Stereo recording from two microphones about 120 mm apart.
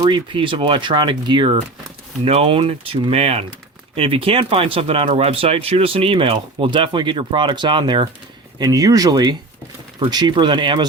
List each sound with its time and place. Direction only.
0.0 s speech: 45° right (ahead or behind)
2.2 s speech: 55° right (ahead or behind)